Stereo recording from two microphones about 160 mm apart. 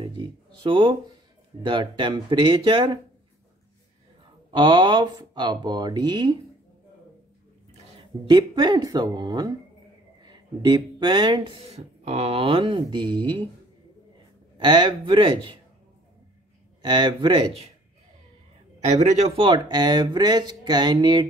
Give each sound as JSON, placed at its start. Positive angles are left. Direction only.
{"t": 0.0, "sound": "speech", "side_deg": -30}
{"t": 4.5, "sound": "speech", "side_deg": -25}
{"t": 8.3, "sound": "speech", "side_deg": -30}
{"t": 14.6, "sound": "speech", "side_deg": -30}
{"t": 16.8, "sound": "speech", "side_deg": -30}
{"t": 18.9, "sound": "speech", "side_deg": -40}